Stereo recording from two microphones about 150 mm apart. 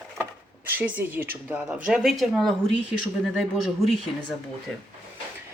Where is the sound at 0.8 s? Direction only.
10° right (ahead or behind).